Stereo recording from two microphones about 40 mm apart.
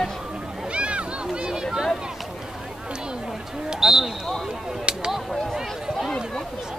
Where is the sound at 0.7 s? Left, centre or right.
Right.